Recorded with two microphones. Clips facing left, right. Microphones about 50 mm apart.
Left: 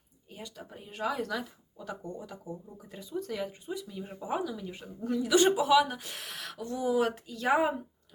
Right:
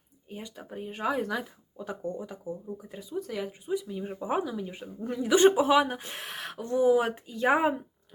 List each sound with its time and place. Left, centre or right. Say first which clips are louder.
0.3 s speech: right 4 dB; centre
4.2 s speech: right 3 dB; right